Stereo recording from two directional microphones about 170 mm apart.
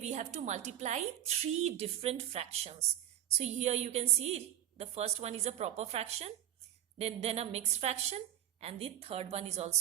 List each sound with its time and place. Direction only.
0.0 s a woman's voice: 40° right (ahead or behind)